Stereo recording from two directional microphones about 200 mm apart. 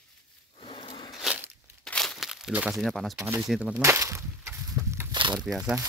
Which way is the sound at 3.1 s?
15° right (ahead or behind).